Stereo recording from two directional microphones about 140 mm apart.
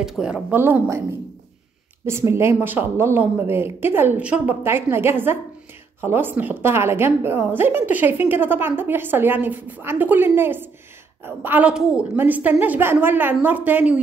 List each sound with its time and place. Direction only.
0.0 s a woman's voice: 5° right (ahead or behind)
2.0 s a woman's voice: 20° right (ahead or behind)